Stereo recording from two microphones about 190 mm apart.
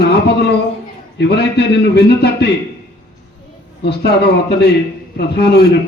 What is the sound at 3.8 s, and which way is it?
A man's voice, 60° left (ahead or behind).